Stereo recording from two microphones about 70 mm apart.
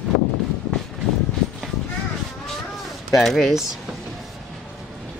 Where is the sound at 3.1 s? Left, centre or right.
Centre.